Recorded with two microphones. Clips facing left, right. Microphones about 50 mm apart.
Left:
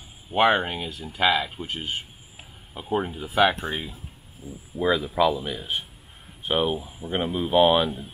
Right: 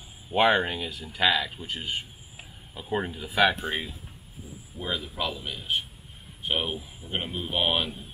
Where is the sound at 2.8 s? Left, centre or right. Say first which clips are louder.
Left 3 dB; centre.